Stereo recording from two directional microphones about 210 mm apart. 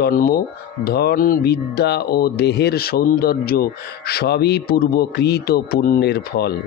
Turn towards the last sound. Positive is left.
turn(degrees=50)  # may be behind; listen again after turning